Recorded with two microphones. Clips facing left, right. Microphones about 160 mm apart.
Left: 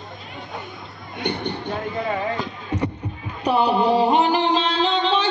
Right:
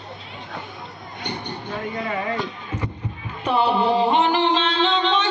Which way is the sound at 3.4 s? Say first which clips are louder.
Left 1 dB; 40° left (ahead or behind).